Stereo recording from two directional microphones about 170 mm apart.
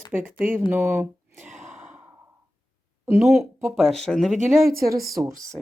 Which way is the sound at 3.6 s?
Centre (ahead or behind).